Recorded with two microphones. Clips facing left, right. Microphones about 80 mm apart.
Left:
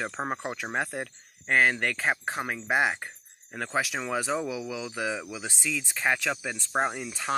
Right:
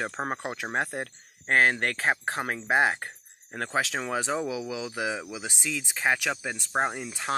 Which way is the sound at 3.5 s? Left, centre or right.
Right.